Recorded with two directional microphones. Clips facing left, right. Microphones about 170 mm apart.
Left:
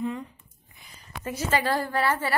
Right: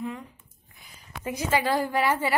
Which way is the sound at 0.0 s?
5° right (ahead or behind).